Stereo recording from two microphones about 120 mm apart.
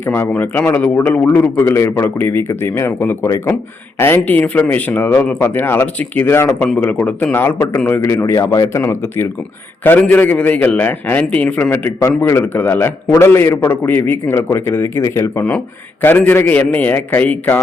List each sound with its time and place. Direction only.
0.0 s a man's voice: 15° left (ahead or behind)